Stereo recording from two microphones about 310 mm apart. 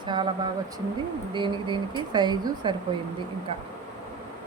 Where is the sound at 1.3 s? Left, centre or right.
Centre.